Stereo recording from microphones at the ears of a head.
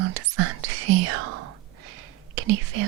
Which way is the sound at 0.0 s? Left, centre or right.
Right.